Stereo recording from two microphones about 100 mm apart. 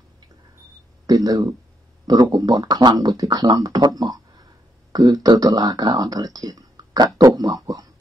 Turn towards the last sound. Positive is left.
turn(degrees=-40)  # may be behind; listen again after turning